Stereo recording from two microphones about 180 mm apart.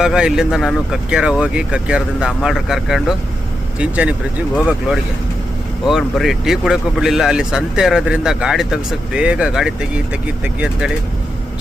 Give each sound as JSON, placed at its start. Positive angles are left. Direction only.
{"t": 0.0, "sound": "speech", "side_deg": -5}